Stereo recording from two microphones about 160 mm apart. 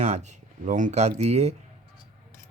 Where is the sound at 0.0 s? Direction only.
45° right (ahead or behind).